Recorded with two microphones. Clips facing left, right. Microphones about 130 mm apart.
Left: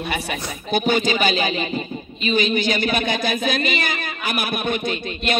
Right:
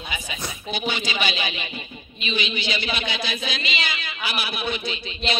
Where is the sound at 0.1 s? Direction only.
55° left (ahead or behind).